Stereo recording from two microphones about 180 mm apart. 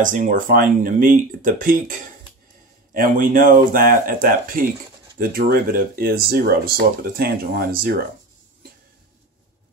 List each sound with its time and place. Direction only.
0.0 s speech: 45° right (ahead or behind)